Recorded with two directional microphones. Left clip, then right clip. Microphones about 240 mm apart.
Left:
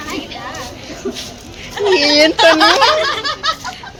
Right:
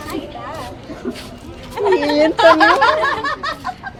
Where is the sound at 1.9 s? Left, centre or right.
Centre.